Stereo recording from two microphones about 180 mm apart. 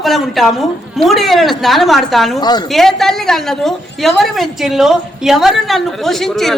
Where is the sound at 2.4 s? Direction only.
25° left (ahead or behind).